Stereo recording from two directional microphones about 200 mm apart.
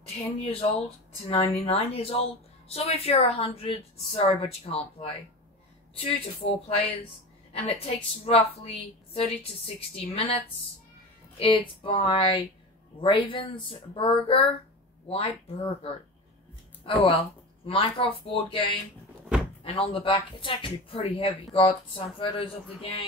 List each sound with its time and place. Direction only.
0.4 s a woman's voice: 30° left (ahead or behind)
19.6 s a woman's voice: 30° left (ahead or behind)